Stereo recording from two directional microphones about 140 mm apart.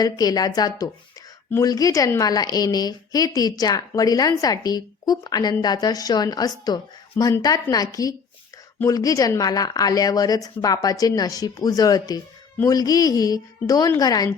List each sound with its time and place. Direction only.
0.0 s a woman's voice: 25° left (ahead or behind)